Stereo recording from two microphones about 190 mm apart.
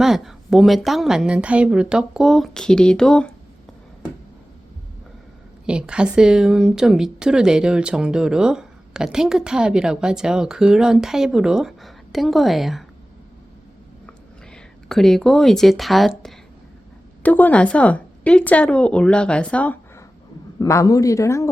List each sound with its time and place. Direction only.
0.0 s speech: centre (ahead or behind)
5.6 s speech: 5° right (ahead or behind)
14.1 s a sound: 5° left (ahead or behind)
17.2 s a woman's voice: 10° left (ahead or behind)
20.6 s a woman's voice: 20° left (ahead or behind)